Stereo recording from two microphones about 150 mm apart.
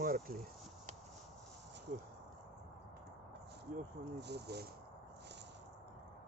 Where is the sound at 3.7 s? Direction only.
75° right (ahead or behind).